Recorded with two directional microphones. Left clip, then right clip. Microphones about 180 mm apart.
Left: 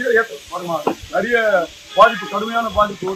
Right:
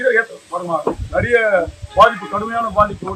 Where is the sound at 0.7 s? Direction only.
25° right (ahead or behind).